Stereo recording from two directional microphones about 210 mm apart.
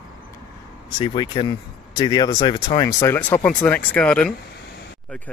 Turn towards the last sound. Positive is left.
turn(degrees=5)  # may be behind; listen again after turning